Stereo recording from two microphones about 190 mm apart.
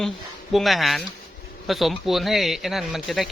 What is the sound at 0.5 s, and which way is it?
Speech, centre (ahead or behind).